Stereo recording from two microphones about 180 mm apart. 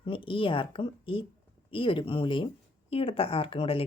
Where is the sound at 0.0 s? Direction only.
30° left (ahead or behind).